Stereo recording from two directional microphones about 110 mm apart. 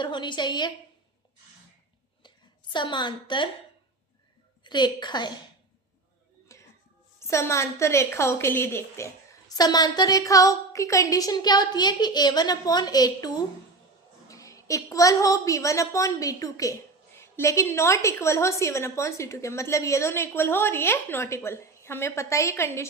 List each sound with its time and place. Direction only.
0.0 s a woman's voice: 45° left (ahead or behind)
2.7 s a woman's voice: 45° left (ahead or behind)
4.6 s a woman's voice: 40° left (ahead or behind)
6.5 s music: 25° left (ahead or behind)
7.2 s a woman's voice: 25° left (ahead or behind)
9.6 s a woman's voice: 35° left (ahead or behind)